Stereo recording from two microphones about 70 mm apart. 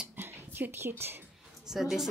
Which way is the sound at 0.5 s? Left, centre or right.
Right.